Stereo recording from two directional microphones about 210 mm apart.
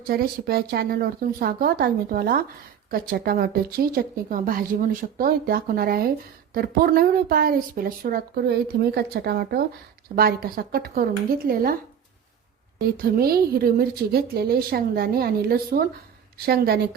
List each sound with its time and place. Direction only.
0.1 s speech: 45° right (ahead or behind)
13.1 s speech: 45° right (ahead or behind)